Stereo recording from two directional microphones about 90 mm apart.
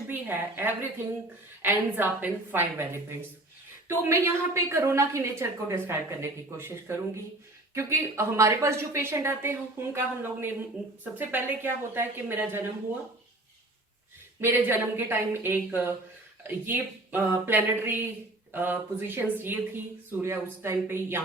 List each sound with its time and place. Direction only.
0.1 s a woman's voice: 25° right (ahead or behind)
14.4 s a woman's voice: 25° right (ahead or behind)